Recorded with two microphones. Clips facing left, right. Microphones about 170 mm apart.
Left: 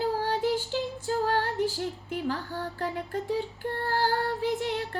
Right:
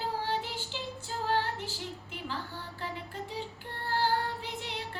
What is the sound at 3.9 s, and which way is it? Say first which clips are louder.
Music: left 2 dB; 45° left (ahead or behind).